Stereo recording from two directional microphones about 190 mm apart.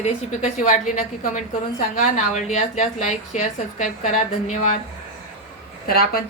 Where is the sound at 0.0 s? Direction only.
40° left (ahead or behind).